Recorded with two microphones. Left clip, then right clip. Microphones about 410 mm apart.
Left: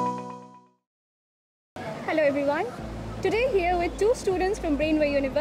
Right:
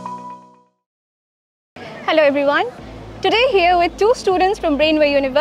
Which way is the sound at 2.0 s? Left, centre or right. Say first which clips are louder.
Right 10 dB; right.